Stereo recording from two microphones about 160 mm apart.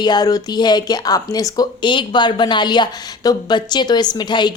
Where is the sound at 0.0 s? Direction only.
25° left (ahead or behind).